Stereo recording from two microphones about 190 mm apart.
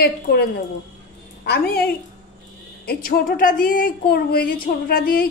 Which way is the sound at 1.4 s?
55° left (ahead or behind).